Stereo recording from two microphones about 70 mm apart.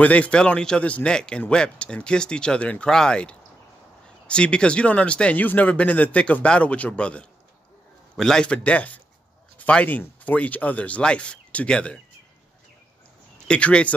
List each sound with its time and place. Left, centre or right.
0.0 s speech: left
13.5 s speech: centre